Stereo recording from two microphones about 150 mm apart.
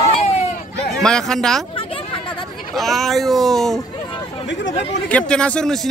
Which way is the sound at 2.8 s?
Centre (ahead or behind).